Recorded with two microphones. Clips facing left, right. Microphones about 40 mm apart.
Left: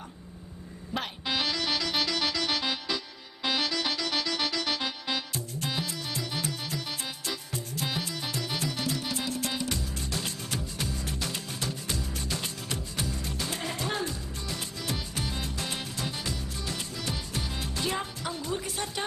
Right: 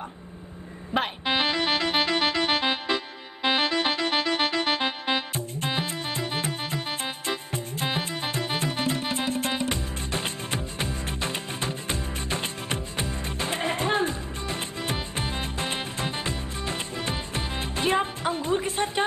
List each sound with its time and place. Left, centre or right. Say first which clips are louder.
0.9 s music: right 6 dB; right